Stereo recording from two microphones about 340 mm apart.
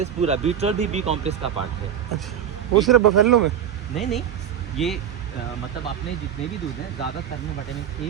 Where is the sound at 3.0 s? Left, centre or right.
Right.